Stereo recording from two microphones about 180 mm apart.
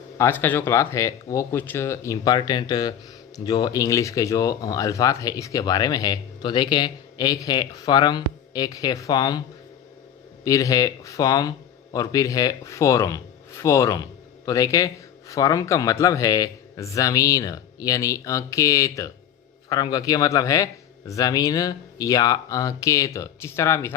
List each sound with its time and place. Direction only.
0.2 s speech: 10° left (ahead or behind)
10.4 s speech: 20° left (ahead or behind)